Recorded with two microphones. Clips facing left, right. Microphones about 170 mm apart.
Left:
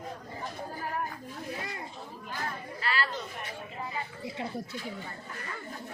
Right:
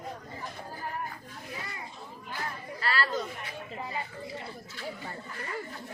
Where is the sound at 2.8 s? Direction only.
40° right (ahead or behind).